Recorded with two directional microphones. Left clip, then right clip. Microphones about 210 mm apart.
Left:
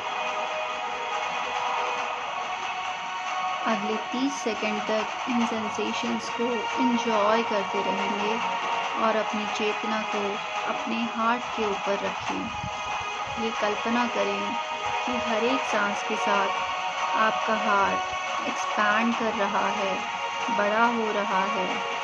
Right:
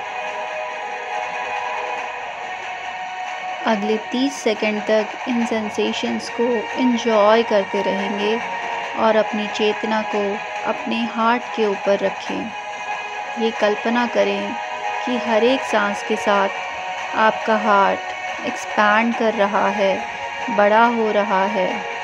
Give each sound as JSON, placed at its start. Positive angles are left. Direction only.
{"t": 3.6, "sound": "speech", "side_deg": -35}
{"t": 9.0, "sound": "speech", "side_deg": -35}
{"t": 13.6, "sound": "speech", "side_deg": -35}
{"t": 15.7, "sound": "speech", "side_deg": -35}